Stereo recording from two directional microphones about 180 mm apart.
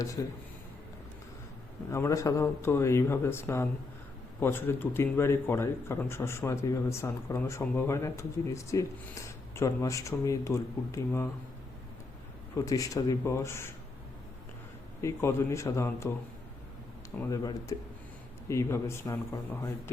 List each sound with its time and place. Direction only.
0.2 s speech: 20° left (ahead or behind)
1.9 s a man's voice: 15° left (ahead or behind)
12.5 s a man's voice: 20° left (ahead or behind)
15.0 s a man's voice: 15° left (ahead or behind)
17.2 s a man's voice: 20° left (ahead or behind)